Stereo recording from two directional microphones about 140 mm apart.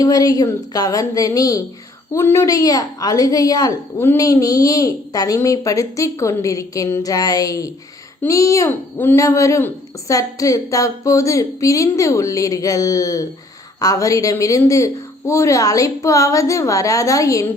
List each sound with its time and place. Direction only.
0.0 s a woman's voice: 25° left (ahead or behind)